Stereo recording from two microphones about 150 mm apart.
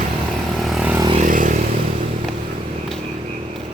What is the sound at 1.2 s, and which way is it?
Vehicle, 60° right (ahead or behind).